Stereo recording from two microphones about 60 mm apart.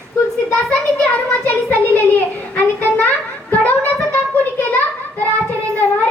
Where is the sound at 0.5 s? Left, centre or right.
Left.